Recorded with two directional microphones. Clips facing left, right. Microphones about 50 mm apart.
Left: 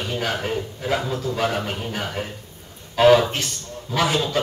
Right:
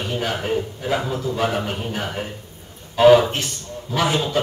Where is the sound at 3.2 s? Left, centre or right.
Right.